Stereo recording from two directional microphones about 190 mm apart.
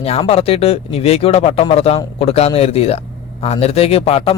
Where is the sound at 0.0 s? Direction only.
30° left (ahead or behind).